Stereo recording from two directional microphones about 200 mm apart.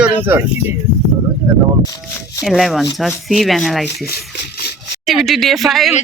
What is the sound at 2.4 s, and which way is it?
Speech, centre (ahead or behind).